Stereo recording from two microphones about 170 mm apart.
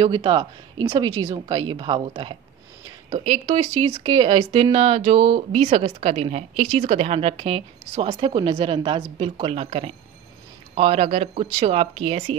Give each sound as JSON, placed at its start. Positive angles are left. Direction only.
{"t": 0.0, "sound": "speech", "side_deg": -30}
{"t": 3.4, "sound": "speech", "side_deg": -30}